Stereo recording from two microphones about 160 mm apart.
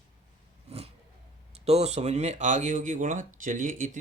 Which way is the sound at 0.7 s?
40° right (ahead or behind).